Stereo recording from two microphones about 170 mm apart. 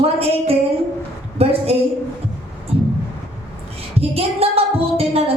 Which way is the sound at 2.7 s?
35° right (ahead or behind).